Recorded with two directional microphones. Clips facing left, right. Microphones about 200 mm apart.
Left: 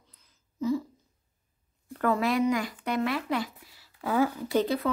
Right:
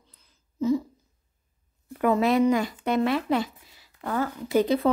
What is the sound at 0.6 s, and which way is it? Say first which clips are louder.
Speech: right 4 dB; 20° right (ahead or behind).